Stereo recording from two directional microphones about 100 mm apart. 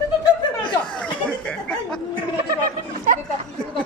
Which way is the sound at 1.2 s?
10° left (ahead or behind).